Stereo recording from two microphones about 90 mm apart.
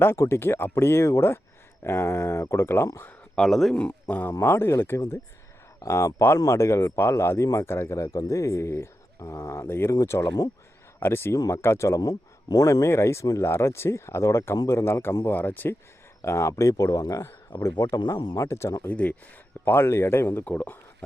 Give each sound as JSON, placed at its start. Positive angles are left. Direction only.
{"t": 0.0, "sound": "speech", "side_deg": 25}
{"t": 3.3, "sound": "speech", "side_deg": 5}
{"t": 4.1, "sound": "speech", "side_deg": 20}
{"t": 11.0, "sound": "speech", "side_deg": 25}
{"t": 16.2, "sound": "speech", "side_deg": 30}
{"t": 17.8, "sound": "speech", "side_deg": 50}
{"t": 18.3, "sound": "speech", "side_deg": 30}
{"t": 18.9, "sound": "speech", "side_deg": 15}